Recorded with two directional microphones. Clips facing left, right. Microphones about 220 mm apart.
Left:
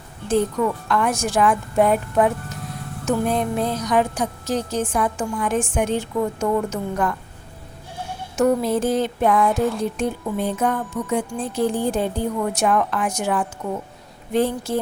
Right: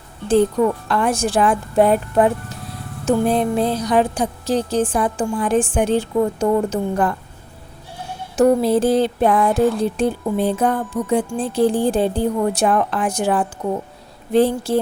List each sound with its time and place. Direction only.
0.3 s a woman's voice: 30° right (ahead or behind)
2.5 s music: 30° right (ahead or behind)
3.1 s a woman's voice: 30° right (ahead or behind)
8.4 s a woman's voice: 30° right (ahead or behind)
9.5 s speech: centre (ahead or behind)
9.8 s a woman's voice: 30° right (ahead or behind)